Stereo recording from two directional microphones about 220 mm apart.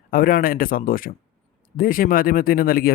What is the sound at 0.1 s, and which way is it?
Speech, 40° left (ahead or behind).